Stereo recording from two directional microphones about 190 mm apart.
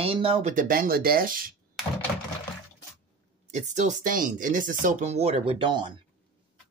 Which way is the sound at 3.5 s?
40° right (ahead or behind).